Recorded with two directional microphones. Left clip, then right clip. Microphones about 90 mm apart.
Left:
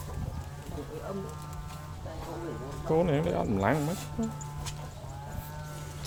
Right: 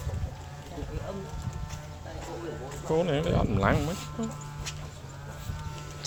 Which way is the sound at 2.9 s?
60° left (ahead or behind).